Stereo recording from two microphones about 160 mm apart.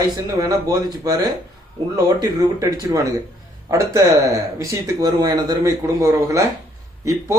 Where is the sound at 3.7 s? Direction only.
20° right (ahead or behind).